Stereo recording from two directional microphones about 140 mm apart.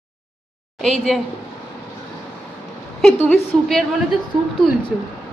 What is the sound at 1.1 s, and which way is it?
Speech, centre (ahead or behind).